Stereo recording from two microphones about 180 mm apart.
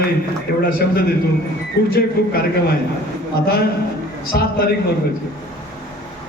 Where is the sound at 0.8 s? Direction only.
60° left (ahead or behind).